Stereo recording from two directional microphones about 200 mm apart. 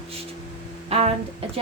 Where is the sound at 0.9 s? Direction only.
30° right (ahead or behind).